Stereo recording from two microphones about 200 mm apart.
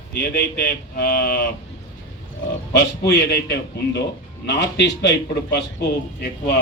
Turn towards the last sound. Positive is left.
turn(degrees=55)  # may be behind; listen again after turning